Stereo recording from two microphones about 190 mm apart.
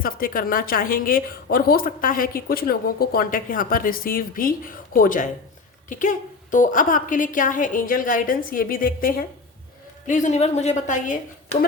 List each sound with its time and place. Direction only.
0.0 s a woman's voice: 50° left (ahead or behind)